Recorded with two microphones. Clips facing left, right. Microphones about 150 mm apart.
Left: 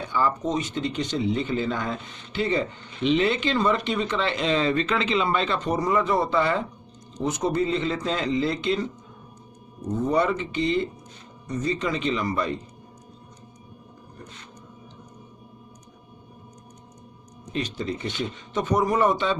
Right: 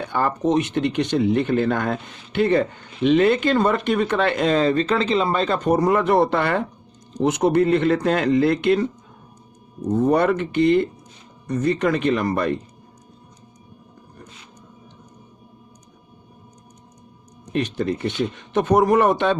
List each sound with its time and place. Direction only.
0.1 s speech: 60° right (ahead or behind)
10.1 s speech: 60° right (ahead or behind)
17.5 s speech: 55° right (ahead or behind)